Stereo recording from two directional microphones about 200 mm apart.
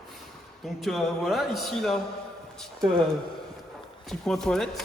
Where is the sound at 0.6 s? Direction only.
Centre (ahead or behind).